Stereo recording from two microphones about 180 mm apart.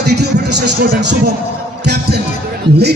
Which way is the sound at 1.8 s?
65° right (ahead or behind).